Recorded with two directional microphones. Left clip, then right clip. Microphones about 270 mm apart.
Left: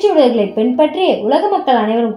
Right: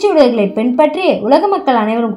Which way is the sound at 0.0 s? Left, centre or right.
Right.